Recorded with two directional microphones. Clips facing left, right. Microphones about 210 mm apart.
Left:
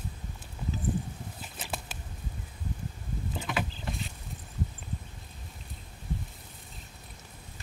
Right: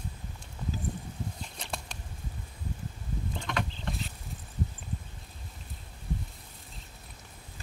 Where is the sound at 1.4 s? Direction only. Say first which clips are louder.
Left 1 dB; 5° left (ahead or behind).